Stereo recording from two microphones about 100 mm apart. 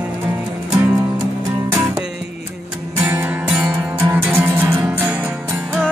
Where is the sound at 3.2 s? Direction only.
10° right (ahead or behind).